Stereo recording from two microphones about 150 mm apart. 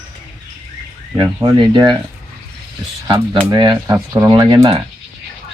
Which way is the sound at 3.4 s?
25° right (ahead or behind).